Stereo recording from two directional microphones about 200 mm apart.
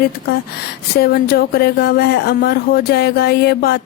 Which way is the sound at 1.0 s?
50° left (ahead or behind).